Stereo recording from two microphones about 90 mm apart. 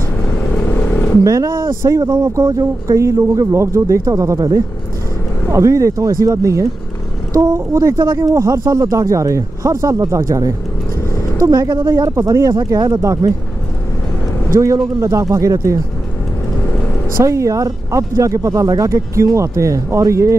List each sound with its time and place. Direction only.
0.7 s vehicle: 20° left (ahead or behind)
1.2 s speech: 35° right (ahead or behind)
14.5 s speech: 35° right (ahead or behind)
17.2 s speech: 35° right (ahead or behind)